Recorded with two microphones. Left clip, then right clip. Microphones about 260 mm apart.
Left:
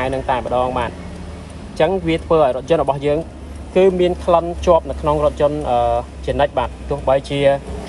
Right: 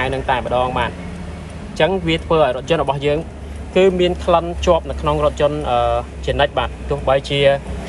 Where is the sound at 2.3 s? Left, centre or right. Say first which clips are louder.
Left 1 dB; right.